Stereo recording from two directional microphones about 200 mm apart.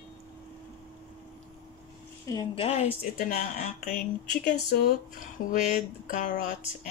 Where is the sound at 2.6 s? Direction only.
30° left (ahead or behind).